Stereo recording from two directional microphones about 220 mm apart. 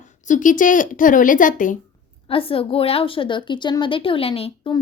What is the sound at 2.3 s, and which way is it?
A woman's voice, 25° left (ahead or behind).